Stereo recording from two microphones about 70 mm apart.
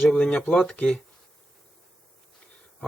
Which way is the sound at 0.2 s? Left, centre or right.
Left.